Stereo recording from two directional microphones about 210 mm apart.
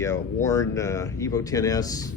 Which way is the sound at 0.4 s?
15° left (ahead or behind).